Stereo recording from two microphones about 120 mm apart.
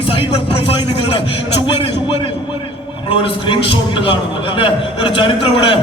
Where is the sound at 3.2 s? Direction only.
45° left (ahead or behind).